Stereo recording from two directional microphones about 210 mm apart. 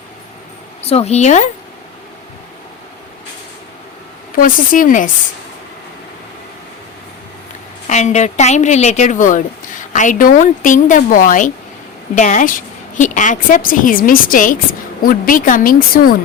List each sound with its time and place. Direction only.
0.8 s a woman's voice: 30° left (ahead or behind)
4.4 s a woman's voice: 40° left (ahead or behind)
7.9 s a woman's voice: 35° left (ahead or behind)